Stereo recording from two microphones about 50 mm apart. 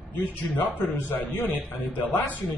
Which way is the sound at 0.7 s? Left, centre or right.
Left.